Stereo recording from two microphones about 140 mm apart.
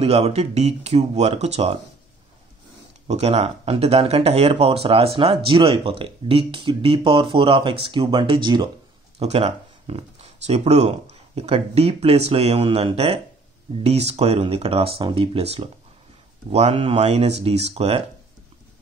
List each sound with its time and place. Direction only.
0.0 s speech: 45° right (ahead or behind)
3.1 s speech: 50° right (ahead or behind); by 8.6 s 35° right (ahead or behind)
9.2 s speech: 45° right (ahead or behind)